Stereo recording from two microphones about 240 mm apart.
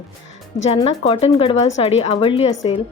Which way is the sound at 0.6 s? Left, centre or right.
Left.